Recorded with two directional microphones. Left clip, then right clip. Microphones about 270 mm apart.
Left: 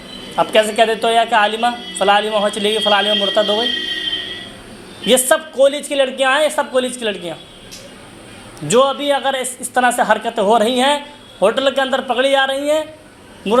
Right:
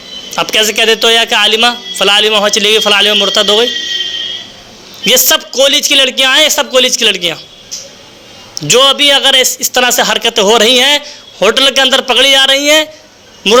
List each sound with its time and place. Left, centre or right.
0.4 s a man's voice: right
5.0 s a man's voice: right
8.5 s a man's voice: right